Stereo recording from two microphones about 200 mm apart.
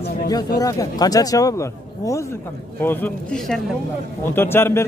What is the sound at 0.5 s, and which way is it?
A man's voice, 15° left (ahead or behind).